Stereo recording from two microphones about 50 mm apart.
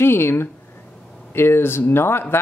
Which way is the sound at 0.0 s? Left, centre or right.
Left.